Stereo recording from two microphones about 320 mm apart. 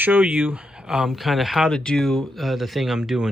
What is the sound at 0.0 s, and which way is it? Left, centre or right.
Speech, centre.